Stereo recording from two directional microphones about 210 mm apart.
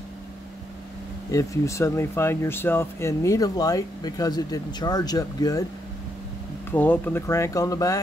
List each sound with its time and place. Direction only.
1.3 s speech: 15° left (ahead or behind)
6.7 s speech: 10° left (ahead or behind)